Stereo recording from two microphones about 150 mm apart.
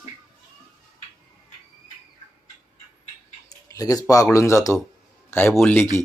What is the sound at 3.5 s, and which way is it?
A man's voice, 25° left (ahead or behind).